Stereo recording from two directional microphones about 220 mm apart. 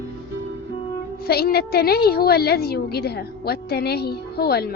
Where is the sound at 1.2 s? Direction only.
45° left (ahead or behind).